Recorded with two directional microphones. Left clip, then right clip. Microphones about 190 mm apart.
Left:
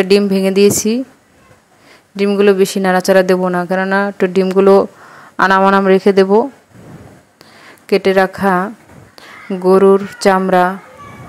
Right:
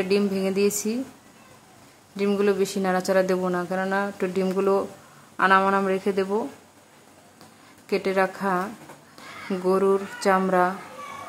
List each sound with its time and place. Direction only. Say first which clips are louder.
0.3 s speech: left 12 dB; 40° left (ahead or behind)
2.1 s speech: left 11 dB; 35° left (ahead or behind)
7.8 s a woman's voice: left 11 dB; 35° left (ahead or behind)